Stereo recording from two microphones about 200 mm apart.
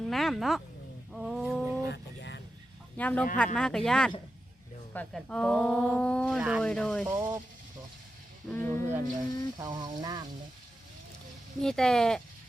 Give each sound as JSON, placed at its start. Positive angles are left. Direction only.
{"t": 0.0, "sound": "a sound", "side_deg": 0}
{"t": 1.9, "sound": "vehicle", "side_deg": 60}
{"t": 3.0, "sound": "speech", "side_deg": 10}
{"t": 7.1, "sound": "speech", "side_deg": -10}
{"t": 8.4, "sound": "speech", "side_deg": 10}
{"t": 9.6, "sound": "a sound", "side_deg": -20}
{"t": 11.6, "sound": "speech", "side_deg": 5}